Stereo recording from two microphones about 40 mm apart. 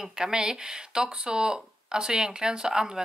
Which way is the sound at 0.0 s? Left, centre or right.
Centre.